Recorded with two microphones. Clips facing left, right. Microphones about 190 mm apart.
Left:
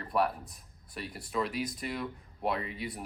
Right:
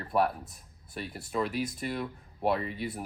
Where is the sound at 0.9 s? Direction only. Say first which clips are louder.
Right 2 dB; centre (ahead or behind).